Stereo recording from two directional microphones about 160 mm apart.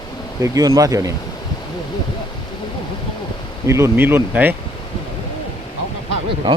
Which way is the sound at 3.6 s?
15° right (ahead or behind).